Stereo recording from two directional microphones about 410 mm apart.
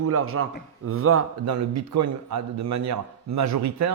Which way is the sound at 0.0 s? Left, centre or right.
Right.